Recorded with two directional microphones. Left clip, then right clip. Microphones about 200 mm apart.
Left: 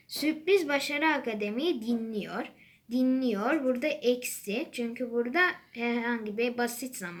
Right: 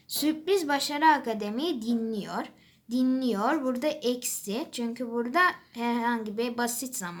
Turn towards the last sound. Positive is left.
turn(degrees=-35)  # may be behind; listen again after turning